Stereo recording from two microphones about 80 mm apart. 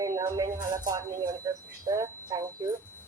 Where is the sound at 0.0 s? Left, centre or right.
Right.